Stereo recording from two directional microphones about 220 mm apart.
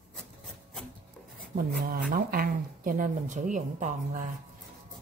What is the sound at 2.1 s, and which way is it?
Speech, 40° right (ahead or behind).